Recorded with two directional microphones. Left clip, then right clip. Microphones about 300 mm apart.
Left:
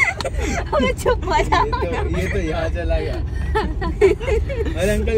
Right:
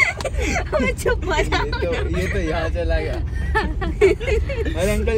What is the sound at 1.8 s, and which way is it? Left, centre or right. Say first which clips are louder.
Speech: even; centre.